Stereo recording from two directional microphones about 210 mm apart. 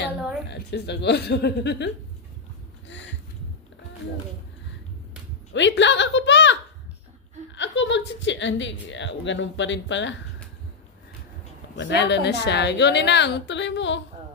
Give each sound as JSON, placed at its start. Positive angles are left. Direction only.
{"t": 0.5, "sound": "speech", "side_deg": 55}
{"t": 5.5, "sound": "speech", "side_deg": 60}
{"t": 11.7, "sound": "speech", "side_deg": 55}